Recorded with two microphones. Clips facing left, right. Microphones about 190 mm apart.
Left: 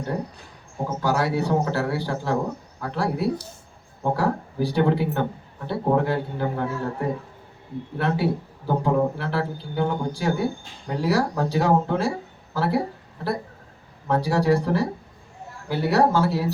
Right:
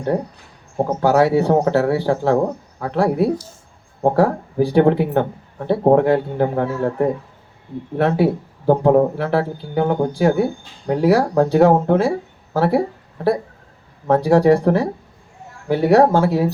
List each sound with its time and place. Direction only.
1.0 s speech: 60° right (ahead or behind)
7.9 s speech: 55° right (ahead or behind)
14.1 s speech: 55° right (ahead or behind)